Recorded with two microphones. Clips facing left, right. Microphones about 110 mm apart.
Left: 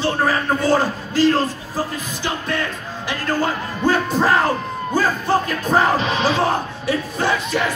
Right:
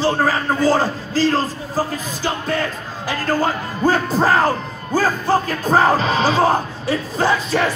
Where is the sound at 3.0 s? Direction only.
35° right (ahead or behind).